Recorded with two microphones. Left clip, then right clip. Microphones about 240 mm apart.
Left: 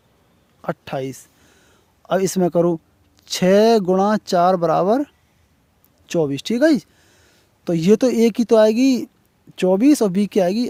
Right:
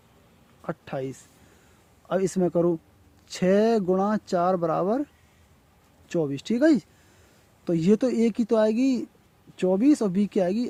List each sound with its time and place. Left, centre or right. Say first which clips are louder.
0.6 s speech: left 7 dB; left